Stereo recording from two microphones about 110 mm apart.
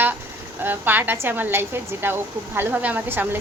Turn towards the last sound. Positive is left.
turn(degrees=-20)  # may be behind; listen again after turning